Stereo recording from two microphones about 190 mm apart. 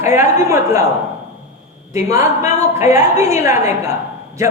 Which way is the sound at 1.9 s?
15° right (ahead or behind).